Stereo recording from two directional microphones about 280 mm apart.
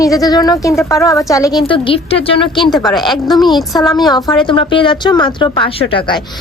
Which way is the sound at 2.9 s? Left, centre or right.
Centre.